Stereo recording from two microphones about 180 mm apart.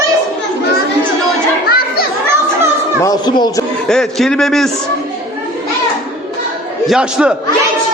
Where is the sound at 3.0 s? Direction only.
25° left (ahead or behind).